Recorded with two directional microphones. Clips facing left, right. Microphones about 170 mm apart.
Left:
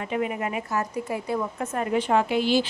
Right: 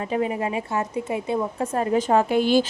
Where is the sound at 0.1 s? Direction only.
30° right (ahead or behind); by 2.6 s 50° right (ahead or behind).